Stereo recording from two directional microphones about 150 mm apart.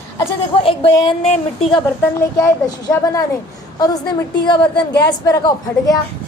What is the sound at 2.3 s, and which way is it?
Speech, 25° left (ahead or behind).